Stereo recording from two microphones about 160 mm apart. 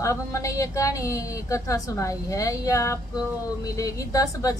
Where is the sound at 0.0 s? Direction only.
20° left (ahead or behind).